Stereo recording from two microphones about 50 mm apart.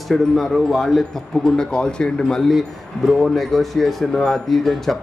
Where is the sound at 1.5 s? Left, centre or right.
Centre.